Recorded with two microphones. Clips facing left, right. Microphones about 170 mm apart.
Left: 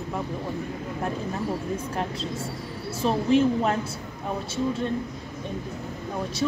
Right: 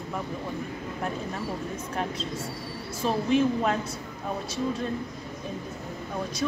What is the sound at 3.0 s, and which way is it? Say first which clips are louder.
Speech: left 3 dB; 30° left (ahead or behind).